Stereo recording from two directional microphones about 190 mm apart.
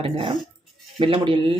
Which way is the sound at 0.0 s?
30° right (ahead or behind).